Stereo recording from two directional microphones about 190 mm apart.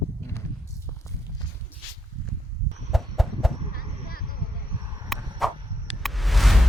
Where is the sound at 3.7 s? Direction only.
50° left (ahead or behind).